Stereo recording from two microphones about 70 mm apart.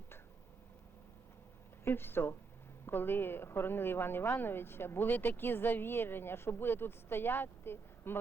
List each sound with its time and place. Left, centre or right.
1.8 s speech: left